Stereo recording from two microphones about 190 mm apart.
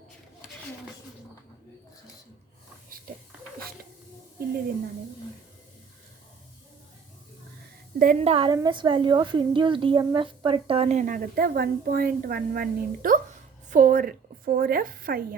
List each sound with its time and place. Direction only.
7.9 s a woman's voice: 45° right (ahead or behind)
8.2 s a woman's voice: 30° right (ahead or behind); by 15.4 s 50° right (ahead or behind)